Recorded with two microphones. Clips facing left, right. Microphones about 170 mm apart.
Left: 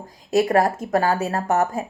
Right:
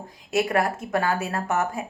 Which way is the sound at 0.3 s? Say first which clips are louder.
Left 5 dB; 35° left (ahead or behind).